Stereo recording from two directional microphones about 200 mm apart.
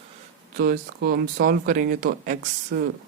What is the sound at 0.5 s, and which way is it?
Speech, 45° right (ahead or behind).